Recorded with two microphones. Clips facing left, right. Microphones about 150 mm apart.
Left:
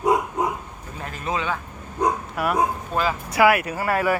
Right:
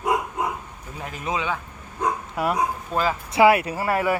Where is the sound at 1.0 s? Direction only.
15° right (ahead or behind).